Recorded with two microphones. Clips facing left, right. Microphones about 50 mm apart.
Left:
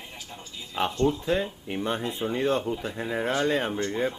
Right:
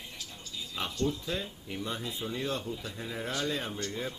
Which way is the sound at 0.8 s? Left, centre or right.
Left.